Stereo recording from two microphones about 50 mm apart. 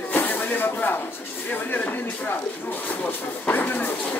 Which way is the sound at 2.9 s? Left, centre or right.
Left.